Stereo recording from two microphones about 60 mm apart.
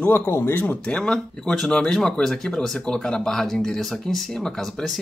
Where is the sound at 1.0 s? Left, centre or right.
Centre.